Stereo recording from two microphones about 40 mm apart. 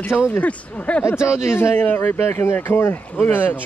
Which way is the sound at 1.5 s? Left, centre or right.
Left.